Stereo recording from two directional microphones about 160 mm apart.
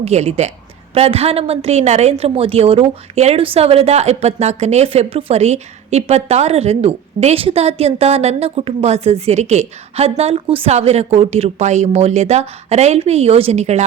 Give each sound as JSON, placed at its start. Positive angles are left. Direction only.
{"t": 0.0, "sound": "a woman's voice", "side_deg": -40}